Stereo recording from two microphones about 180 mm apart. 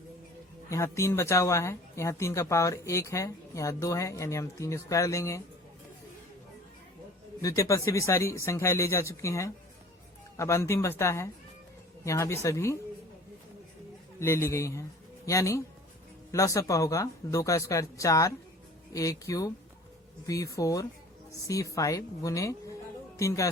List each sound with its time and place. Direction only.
0.7 s speech: 15° left (ahead or behind)
7.4 s speech: 15° left (ahead or behind)
14.2 s speech: 15° left (ahead or behind)